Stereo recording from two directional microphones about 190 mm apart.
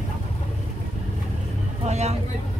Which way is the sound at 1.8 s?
35° right (ahead or behind).